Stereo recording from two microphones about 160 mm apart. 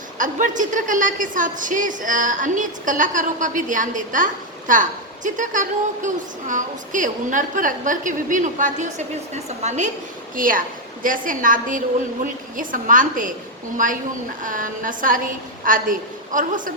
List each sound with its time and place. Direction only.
0.2 s a woman's voice: 55° right (ahead or behind)
10.3 s a woman's voice: 60° right (ahead or behind)